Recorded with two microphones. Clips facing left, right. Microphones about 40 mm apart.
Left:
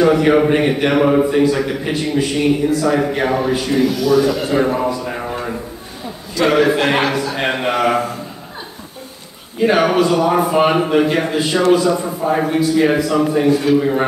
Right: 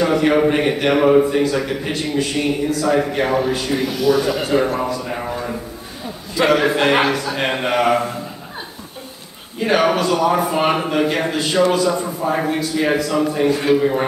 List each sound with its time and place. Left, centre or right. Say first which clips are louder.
0.0 s a man's voice: left 3 dB; centre
3.7 s speech: left 3 dB; centre
4.5 s a man's voice: left 2 dB; centre
6.5 s a man's voice: left 1 dB; centre
9.6 s a man's voice: left 3 dB; centre
13.5 s a man's voice: left 2 dB; right
13.7 s a man's voice: left 2 dB; centre